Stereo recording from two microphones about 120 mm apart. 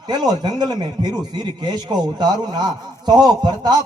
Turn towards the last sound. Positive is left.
turn(degrees=-35)  # may be behind; listen again after turning